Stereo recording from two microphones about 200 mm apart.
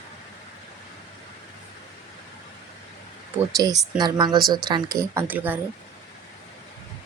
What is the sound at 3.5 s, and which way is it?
Speech, 20° right (ahead or behind).